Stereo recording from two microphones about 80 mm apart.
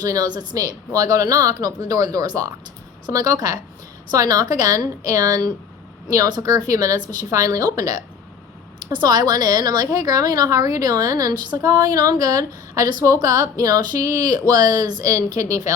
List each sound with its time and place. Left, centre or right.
0.0 s a woman's voice: right
7.3 s a woman's voice: right
8.9 s a woman's voice: right
15.0 s a woman's voice: right